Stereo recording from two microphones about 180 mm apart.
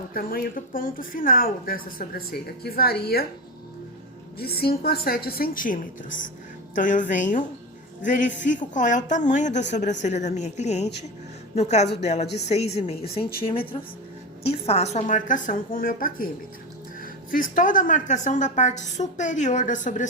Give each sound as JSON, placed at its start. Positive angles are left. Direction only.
{"t": 0.1, "sound": "speech", "side_deg": 55}
{"t": 4.4, "sound": "a woman's voice", "side_deg": 60}